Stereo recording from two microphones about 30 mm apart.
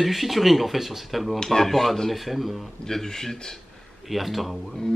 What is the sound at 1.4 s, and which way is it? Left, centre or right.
Speech, centre.